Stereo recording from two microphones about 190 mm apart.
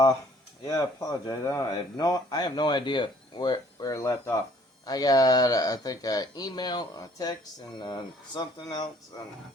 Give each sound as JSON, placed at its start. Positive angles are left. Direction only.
{"t": 0.6, "sound": "speech", "side_deg": 20}